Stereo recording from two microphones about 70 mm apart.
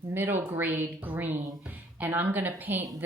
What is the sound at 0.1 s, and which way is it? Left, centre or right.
A woman's voice, right.